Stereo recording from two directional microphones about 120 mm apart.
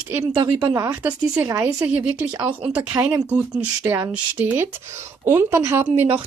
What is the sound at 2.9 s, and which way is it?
Speech, 30° right (ahead or behind).